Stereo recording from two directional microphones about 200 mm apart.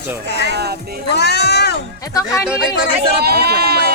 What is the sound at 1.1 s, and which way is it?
Speech, 55° left (ahead or behind).